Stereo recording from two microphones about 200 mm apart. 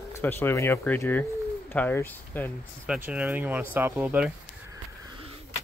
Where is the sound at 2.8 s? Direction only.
5° right (ahead or behind).